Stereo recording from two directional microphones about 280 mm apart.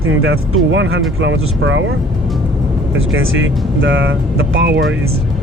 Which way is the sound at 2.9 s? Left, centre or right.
Right.